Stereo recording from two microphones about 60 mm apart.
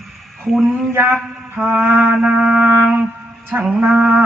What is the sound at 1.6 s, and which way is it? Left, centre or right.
Music, right.